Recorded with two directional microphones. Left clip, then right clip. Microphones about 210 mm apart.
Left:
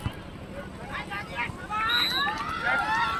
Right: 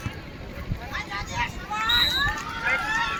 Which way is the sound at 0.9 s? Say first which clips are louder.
Right 3 dB; 50° left (ahead or behind).